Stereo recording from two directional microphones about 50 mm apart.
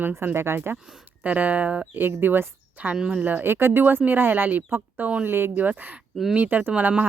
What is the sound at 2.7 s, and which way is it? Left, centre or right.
Speech, right.